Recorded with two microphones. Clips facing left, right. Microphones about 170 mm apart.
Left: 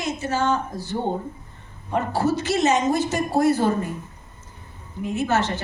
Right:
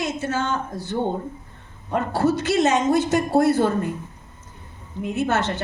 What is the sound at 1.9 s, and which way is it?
A woman's voice, 55° right (ahead or behind).